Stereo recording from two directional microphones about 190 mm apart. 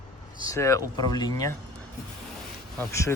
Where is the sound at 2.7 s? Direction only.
15° left (ahead or behind).